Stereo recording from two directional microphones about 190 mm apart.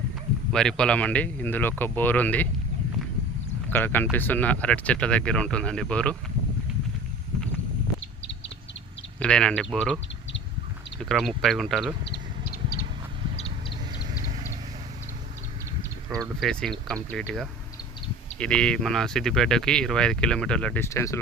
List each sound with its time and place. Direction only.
0.5 s speech: 5° left (ahead or behind)
3.7 s speech: 10° left (ahead or behind)
9.2 s speech: 5° left (ahead or behind)
11.1 s speech: centre (ahead or behind)
12.0 s a sound: 55° left (ahead or behind)
16.4 s speech: 5° left (ahead or behind)